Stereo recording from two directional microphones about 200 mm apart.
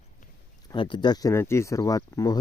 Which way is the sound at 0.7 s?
25° left (ahead or behind).